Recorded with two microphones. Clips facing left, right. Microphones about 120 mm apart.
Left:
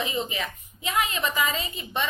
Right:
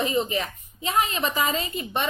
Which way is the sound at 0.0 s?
40° right (ahead or behind).